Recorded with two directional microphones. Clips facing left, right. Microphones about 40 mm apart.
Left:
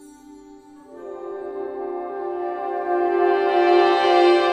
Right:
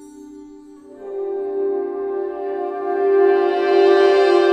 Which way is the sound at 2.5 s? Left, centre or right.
Left.